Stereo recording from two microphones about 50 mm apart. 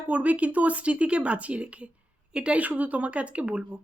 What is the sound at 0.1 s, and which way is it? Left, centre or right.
A woman's voice, right.